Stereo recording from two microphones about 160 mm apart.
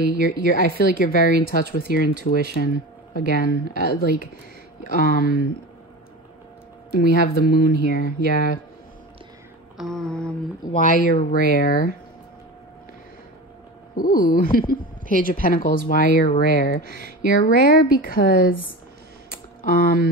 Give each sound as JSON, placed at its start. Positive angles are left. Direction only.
{"t": 0.2, "sound": "speech", "side_deg": 60}
{"t": 6.9, "sound": "speech", "side_deg": 65}
{"t": 9.8, "sound": "mantra", "side_deg": 0}
{"t": 10.6, "sound": "speech", "side_deg": 55}
{"t": 13.9, "sound": "speech", "side_deg": 60}
{"t": 19.6, "sound": "speech", "side_deg": 65}